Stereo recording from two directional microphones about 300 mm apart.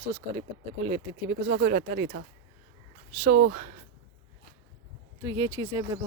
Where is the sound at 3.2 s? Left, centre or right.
Right.